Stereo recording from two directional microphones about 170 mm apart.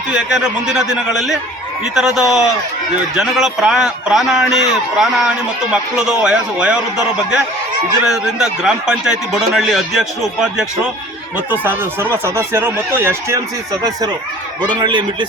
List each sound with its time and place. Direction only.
0.1 s a man's voice: 5° right (ahead or behind)
14.6 s speech: 25° right (ahead or behind)